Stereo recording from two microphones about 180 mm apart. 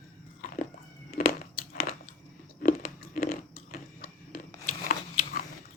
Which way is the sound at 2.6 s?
55° left (ahead or behind).